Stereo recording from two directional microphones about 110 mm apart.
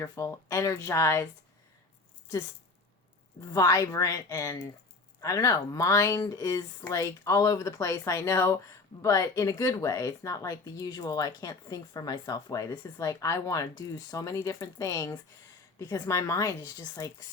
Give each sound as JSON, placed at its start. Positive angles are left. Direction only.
{"t": 0.0, "sound": "speech", "side_deg": 25}
{"t": 3.4, "sound": "speech", "side_deg": 35}